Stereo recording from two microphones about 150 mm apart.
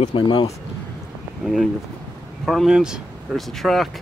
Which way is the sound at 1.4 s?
Centre (ahead or behind).